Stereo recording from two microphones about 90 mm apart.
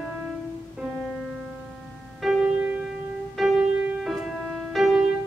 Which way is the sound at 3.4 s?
Centre (ahead or behind).